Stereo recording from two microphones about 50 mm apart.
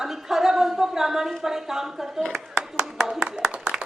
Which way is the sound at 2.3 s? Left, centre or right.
Centre.